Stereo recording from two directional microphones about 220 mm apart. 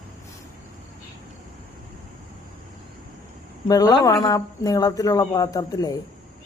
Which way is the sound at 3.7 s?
15° left (ahead or behind).